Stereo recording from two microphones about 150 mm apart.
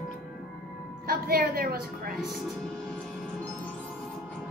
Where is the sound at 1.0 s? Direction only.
75° right (ahead or behind).